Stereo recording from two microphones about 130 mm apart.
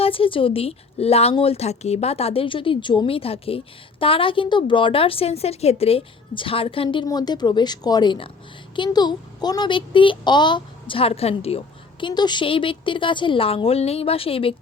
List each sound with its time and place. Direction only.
0.0 s a woman's voice: 45° left (ahead or behind)